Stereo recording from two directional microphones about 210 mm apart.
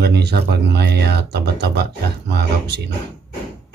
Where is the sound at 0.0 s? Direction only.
50° right (ahead or behind).